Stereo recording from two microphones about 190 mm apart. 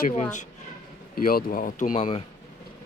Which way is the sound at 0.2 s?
40° left (ahead or behind).